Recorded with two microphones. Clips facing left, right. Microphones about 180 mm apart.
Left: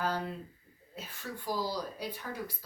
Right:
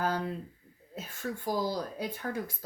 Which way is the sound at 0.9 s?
45° right (ahead or behind).